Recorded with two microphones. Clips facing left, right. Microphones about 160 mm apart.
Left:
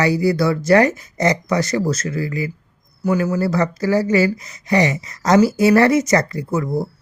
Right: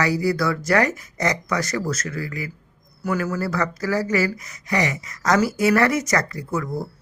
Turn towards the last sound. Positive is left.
turn(degrees=25)  # may be behind; listen again after turning